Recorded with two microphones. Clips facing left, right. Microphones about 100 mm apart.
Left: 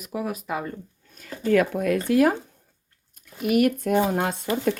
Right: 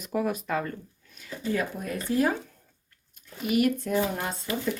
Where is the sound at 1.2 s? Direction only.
45° left (ahead or behind).